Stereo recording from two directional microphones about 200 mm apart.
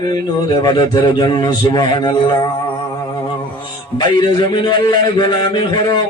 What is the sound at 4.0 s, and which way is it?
Speech, 20° left (ahead or behind).